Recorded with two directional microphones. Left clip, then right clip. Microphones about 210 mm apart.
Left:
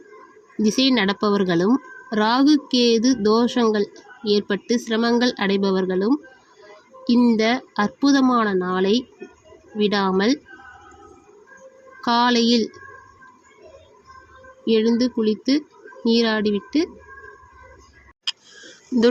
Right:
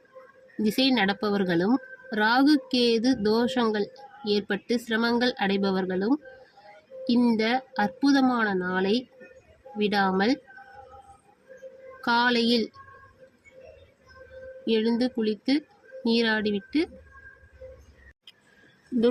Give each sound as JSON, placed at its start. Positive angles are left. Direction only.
{"t": 0.5, "sound": "speech", "side_deg": 20}
{"t": 11.9, "sound": "speech", "side_deg": 20}
{"t": 14.7, "sound": "speech", "side_deg": 20}